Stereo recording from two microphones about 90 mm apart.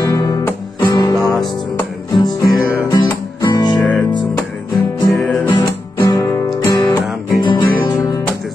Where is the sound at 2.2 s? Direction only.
50° left (ahead or behind).